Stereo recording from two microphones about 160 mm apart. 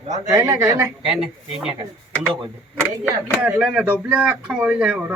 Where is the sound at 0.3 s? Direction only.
15° right (ahead or behind).